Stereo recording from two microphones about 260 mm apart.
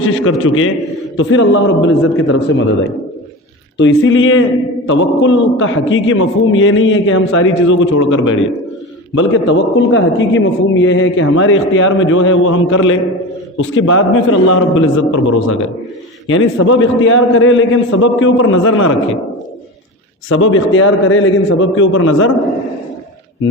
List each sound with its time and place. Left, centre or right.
0.0 s a man's voice: left
3.8 s a man's voice: left
20.3 s a man's voice: left